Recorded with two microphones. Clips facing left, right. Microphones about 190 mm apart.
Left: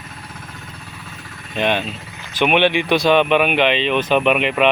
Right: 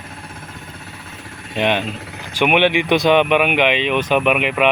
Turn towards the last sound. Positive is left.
turn(degrees=-10)  # may be behind; listen again after turning